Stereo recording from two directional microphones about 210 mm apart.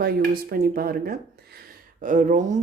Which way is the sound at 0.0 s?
45° right (ahead or behind).